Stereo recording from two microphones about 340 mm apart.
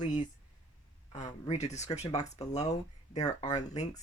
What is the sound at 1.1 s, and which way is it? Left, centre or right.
Speech, centre.